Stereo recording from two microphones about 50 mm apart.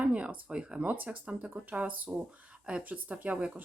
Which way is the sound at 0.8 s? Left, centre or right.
Right.